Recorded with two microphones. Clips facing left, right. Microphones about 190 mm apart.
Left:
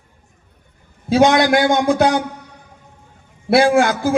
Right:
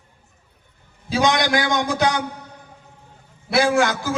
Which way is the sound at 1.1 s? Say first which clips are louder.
Left 7 dB; 55° left (ahead or behind).